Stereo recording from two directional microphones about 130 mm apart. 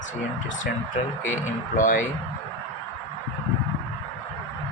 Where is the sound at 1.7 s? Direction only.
90° left.